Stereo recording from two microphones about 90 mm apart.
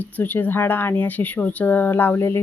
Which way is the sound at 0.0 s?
20° left (ahead or behind).